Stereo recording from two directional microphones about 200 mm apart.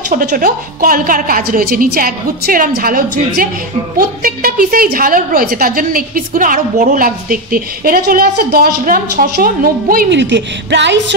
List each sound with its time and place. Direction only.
0.1 s a woman's voice: 40° right (ahead or behind)
10.2 s music: 60° right (ahead or behind)